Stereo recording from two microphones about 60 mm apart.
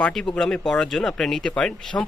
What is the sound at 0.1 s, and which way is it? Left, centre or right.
Speech, centre.